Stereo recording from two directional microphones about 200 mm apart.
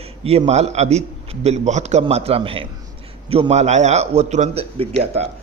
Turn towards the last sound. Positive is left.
turn(degrees=-30)  # may be behind; listen again after turning